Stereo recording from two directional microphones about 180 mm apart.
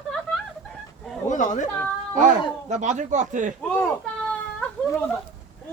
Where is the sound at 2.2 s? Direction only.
45° right (ahead or behind).